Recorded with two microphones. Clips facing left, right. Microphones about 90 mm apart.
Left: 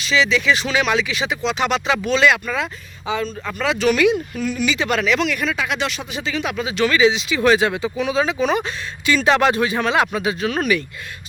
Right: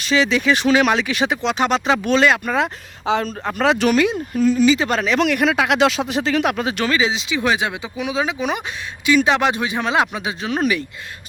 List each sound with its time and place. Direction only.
0.0 s speech: 50° right (ahead or behind)
1.5 s speech: 35° right (ahead or behind)
3.1 s a man's voice: 70° right (ahead or behind)
3.4 s speech: 55° right (ahead or behind)
3.9 s speech: 35° right (ahead or behind)
5.2 s speech: 65° right (ahead or behind)
6.8 s speech: 30° right (ahead or behind)
7.3 s speech: 15° right (ahead or behind)